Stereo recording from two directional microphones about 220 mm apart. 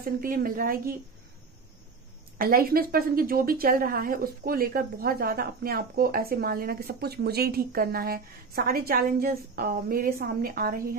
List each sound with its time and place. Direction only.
0.0 s a woman's voice: 40° right (ahead or behind)
2.3 s a woman's voice: 40° right (ahead or behind)